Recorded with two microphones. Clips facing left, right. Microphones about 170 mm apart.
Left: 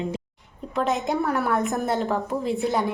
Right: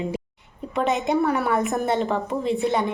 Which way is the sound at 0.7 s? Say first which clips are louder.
Right 2 dB; centre (ahead or behind).